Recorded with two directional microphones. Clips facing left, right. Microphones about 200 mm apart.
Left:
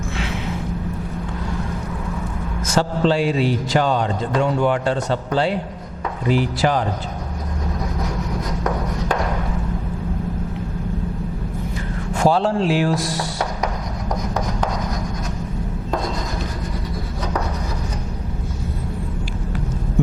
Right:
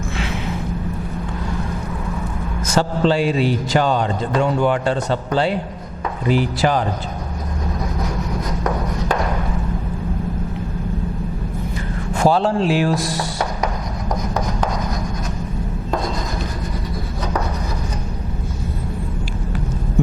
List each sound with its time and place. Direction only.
2.7 s a man's voice: 15° right (ahead or behind)
8.4 s a sound: 25° right (ahead or behind)
12.1 s speech: 15° right (ahead or behind)
14.1 s rub: 30° right (ahead or behind)